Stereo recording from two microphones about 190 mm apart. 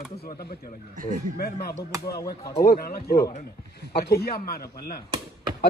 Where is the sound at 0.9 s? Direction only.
45° right (ahead or behind).